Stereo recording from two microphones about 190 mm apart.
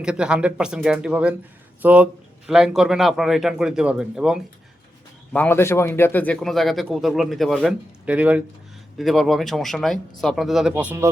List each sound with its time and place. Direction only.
0.0 s a man's voice: 5° right (ahead or behind)
5.3 s a man's voice: 10° left (ahead or behind); by 11.1 s 10° right (ahead or behind)